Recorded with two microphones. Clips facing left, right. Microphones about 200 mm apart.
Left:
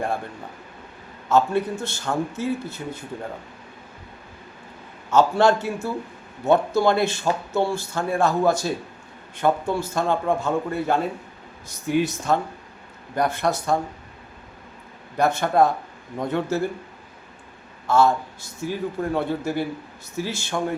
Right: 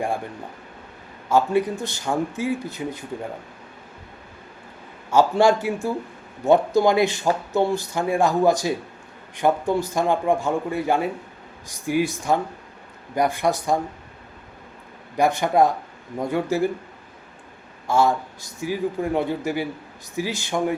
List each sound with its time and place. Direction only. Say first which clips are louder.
1.3 s speech: right 1 dB; 10° right (ahead or behind)
5.1 s speech: right 1 dB; 10° right (ahead or behind)
15.1 s speech: right 1 dB; 15° right (ahead or behind)
17.8 s speech: left 1 dB; 15° right (ahead or behind)